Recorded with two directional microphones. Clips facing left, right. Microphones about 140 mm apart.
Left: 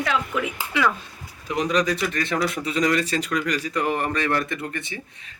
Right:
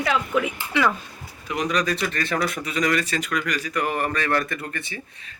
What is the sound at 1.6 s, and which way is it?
Speech, 25° left (ahead or behind).